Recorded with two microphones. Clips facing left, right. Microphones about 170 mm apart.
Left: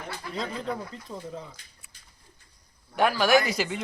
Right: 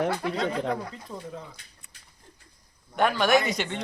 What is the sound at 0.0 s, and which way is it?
Speech, 70° right (ahead or behind).